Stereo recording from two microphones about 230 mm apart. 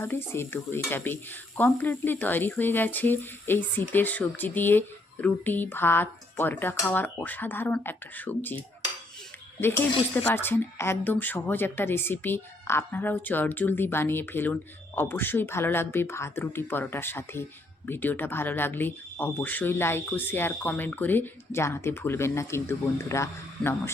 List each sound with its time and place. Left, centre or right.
0.0 s speech: centre